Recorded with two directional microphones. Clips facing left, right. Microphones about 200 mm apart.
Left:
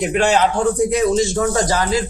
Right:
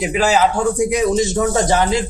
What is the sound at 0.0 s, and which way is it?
A man's voice, 5° right (ahead or behind).